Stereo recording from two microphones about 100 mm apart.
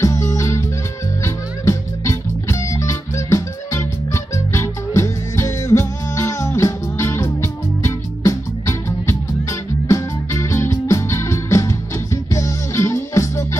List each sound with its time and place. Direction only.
0.0 s music: 30° left (ahead or behind)